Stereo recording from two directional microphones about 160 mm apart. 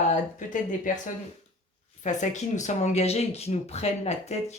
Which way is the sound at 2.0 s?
50° left (ahead or behind).